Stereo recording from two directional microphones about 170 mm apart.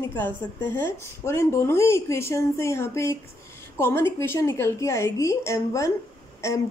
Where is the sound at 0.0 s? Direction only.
15° left (ahead or behind).